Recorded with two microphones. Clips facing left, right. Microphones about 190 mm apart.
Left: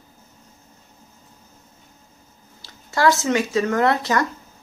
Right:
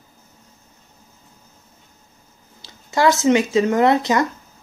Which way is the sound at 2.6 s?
20° right (ahead or behind).